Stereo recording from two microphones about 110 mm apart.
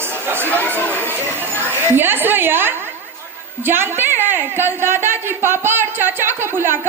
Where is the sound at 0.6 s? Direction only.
20° right (ahead or behind).